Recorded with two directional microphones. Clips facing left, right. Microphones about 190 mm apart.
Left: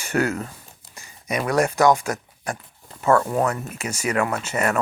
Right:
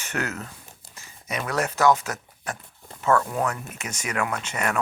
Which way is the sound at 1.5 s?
15° left (ahead or behind).